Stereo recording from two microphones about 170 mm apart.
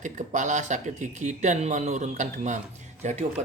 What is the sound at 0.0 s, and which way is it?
Speech, 45° right (ahead or behind).